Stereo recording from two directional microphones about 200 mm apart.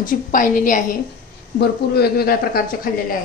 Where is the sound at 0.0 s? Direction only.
40° left (ahead or behind).